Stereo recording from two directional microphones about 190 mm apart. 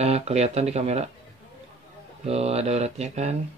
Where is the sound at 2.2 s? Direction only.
35° right (ahead or behind).